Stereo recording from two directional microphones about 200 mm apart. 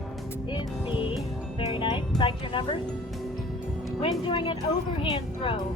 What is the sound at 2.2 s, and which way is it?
Speech, 25° left (ahead or behind).